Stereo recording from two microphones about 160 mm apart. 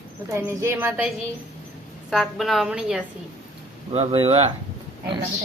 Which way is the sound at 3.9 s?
35° right (ahead or behind).